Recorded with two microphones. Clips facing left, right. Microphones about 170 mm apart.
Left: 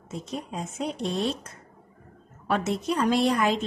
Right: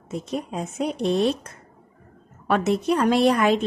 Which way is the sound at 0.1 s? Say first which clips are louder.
Right 5 dB; 65° right (ahead or behind).